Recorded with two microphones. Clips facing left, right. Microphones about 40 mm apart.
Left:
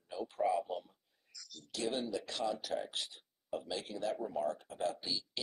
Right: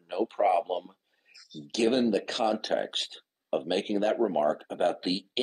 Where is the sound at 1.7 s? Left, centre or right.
Right.